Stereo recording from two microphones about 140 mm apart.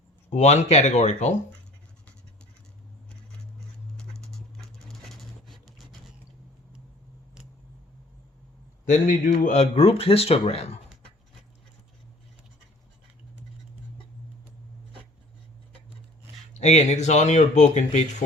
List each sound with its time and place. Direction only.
0.3 s speech: 55° left (ahead or behind)
3.9 s a sound: 5° left (ahead or behind)
8.9 s a man's voice: 70° left (ahead or behind)
9.6 s speech: 40° left (ahead or behind)
16.6 s speech: 50° left (ahead or behind)